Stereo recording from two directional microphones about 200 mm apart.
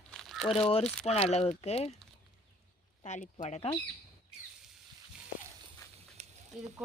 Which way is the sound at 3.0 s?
35° left (ahead or behind).